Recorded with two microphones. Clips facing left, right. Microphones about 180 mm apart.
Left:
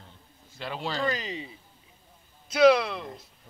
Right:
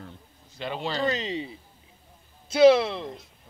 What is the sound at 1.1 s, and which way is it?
Speech, 25° right (ahead or behind).